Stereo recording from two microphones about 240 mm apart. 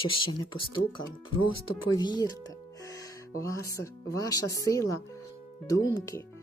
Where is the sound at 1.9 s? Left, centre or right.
Centre.